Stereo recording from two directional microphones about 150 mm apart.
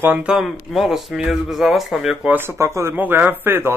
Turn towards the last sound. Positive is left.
turn(degrees=-15)  # may be behind; listen again after turning